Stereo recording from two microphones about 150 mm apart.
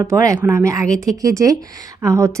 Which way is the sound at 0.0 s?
20° right (ahead or behind).